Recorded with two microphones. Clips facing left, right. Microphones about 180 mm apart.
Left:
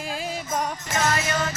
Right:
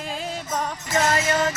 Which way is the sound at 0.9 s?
35° right (ahead or behind).